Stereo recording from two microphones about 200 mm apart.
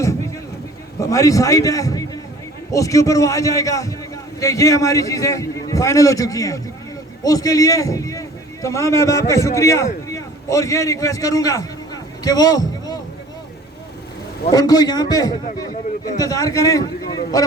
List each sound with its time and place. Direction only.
0.9 s a man's voice: 15° left (ahead or behind)
12.2 s a sound: 20° left (ahead or behind)
14.5 s a man's voice: 20° left (ahead or behind)